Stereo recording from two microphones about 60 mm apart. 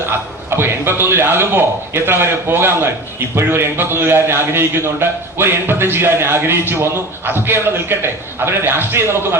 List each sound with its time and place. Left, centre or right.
0.5 s a man's voice: right